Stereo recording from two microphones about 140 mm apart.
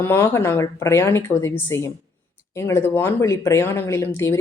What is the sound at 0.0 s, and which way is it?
Speech, 15° left (ahead or behind).